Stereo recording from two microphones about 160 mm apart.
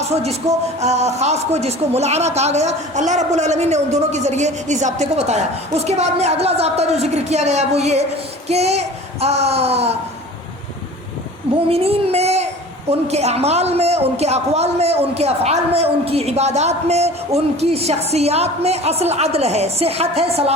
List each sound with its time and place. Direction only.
0.8 s a woman's voice: 45° right (ahead or behind)
11.7 s a child's voice: 40° right (ahead or behind)